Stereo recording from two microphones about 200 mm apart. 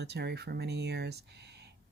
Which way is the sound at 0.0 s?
55° right (ahead or behind).